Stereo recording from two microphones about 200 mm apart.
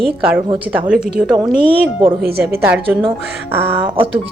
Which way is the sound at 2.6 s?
10° right (ahead or behind).